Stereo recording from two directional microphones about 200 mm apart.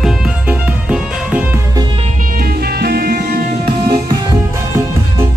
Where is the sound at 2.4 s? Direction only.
50° right (ahead or behind).